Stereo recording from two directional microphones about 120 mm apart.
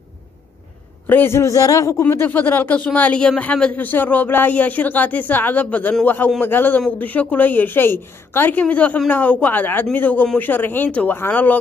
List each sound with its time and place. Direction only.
1.0 s a man's voice: 20° left (ahead or behind)